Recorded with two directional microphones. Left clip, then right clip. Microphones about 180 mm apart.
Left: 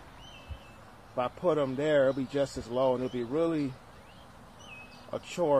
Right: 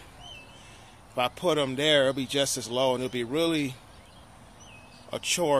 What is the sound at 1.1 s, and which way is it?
Speech, 15° right (ahead or behind).